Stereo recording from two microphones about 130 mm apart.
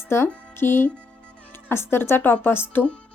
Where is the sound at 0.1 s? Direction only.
20° left (ahead or behind).